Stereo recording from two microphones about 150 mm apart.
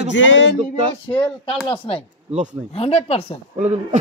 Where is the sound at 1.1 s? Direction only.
35° left (ahead or behind).